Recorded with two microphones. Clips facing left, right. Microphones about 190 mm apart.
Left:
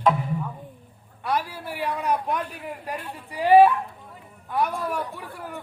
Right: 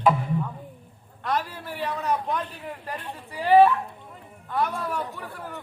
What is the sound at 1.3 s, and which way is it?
A man's voice, 10° left (ahead or behind).